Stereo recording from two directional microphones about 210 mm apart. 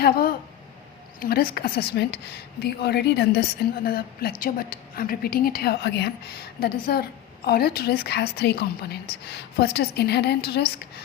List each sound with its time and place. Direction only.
0.0 s a woman's voice: 45° left (ahead or behind)